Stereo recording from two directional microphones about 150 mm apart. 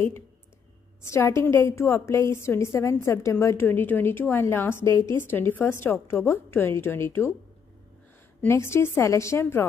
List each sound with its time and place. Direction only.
1.0 s a woman's voice: 20° left (ahead or behind)
8.4 s a woman's voice: 15° left (ahead or behind)